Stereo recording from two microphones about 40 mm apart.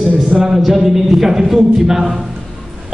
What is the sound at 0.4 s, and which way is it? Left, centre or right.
A man's voice, centre.